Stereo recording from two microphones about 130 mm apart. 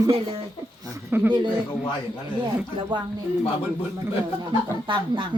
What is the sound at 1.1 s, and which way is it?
Speech, 15° right (ahead or behind).